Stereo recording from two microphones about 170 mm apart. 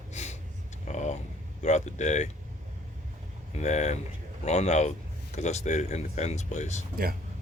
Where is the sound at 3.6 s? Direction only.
45° left (ahead or behind).